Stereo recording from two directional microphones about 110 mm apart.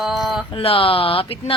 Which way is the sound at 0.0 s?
Centre (ahead or behind).